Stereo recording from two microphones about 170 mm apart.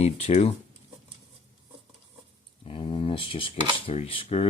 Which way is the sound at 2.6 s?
35° left (ahead or behind).